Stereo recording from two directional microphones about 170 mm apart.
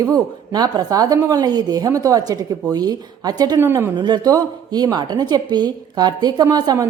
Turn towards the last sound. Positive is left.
turn(degrees=-25)  # may be behind; listen again after turning